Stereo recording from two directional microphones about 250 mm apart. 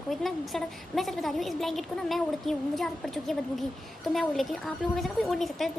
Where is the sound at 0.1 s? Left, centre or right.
Centre.